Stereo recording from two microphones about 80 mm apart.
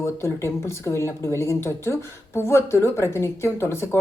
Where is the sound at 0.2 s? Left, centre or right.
Left.